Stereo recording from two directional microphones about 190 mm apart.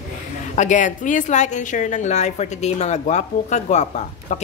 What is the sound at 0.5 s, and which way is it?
A woman's voice, 40° left (ahead or behind).